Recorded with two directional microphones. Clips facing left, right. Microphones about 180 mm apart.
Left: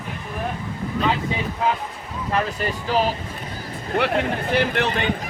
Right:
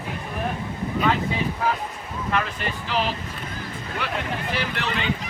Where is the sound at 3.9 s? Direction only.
55° left (ahead or behind).